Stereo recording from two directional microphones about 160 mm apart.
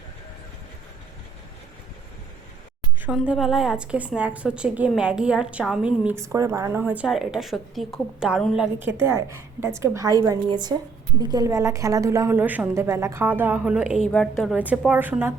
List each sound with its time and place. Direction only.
3.0 s a woman's voice: 5° right (ahead or behind)
14.1 s a woman's voice: 5° left (ahead or behind)
14.5 s a woman's voice: 10° right (ahead or behind)